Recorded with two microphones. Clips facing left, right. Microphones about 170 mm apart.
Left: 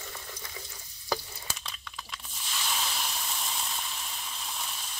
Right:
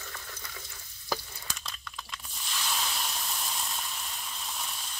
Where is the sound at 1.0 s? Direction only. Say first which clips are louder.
Left 2 dB; centre (ahead or behind).